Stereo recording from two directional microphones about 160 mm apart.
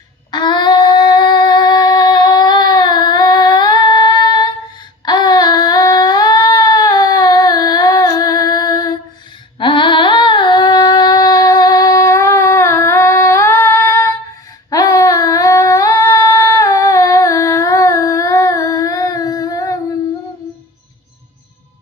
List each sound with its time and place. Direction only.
0.3 s singing: 25° left (ahead or behind)
5.0 s a sound: 25° left (ahead or behind)
9.6 s humming: 30° left (ahead or behind)